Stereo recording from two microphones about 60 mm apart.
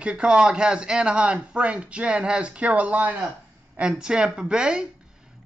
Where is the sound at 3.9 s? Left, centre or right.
Centre.